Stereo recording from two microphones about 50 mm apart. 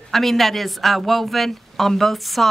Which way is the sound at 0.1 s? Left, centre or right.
Centre.